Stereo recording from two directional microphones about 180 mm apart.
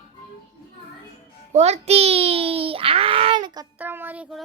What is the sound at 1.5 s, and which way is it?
A child's voice, 35° right (ahead or behind).